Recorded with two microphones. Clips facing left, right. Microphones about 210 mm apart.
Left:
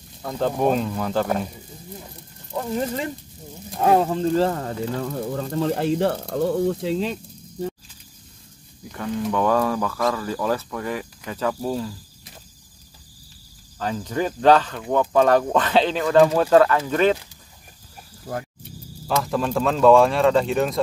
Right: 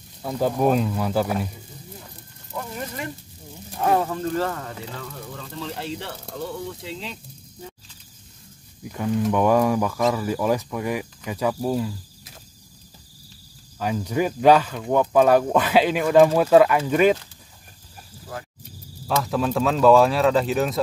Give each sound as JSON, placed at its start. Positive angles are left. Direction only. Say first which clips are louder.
{"t": 0.2, "sound": "speech", "louder": "even", "side_deg": -5}
{"t": 2.5, "sound": "speech", "louder": "left 7 dB", "side_deg": 30}
{"t": 9.3, "sound": "speech", "louder": "right 1 dB", "side_deg": -15}
{"t": 13.7, "sound": "speech", "louder": "right 1 dB", "side_deg": -10}
{"t": 19.0, "sound": "speech", "louder": "even", "side_deg": 0}